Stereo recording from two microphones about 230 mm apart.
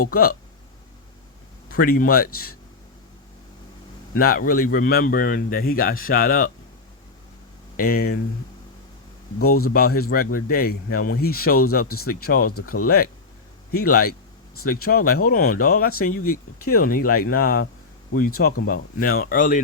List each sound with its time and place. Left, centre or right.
0.0 s a man's voice: left
1.8 s a man's voice: left
4.1 s a man's voice: left
7.8 s a man's voice: left
9.4 s speech: left
9.7 s a man's voice: left
12.5 s speech: left
12.8 s a man's voice: left
18.6 s a man's voice: left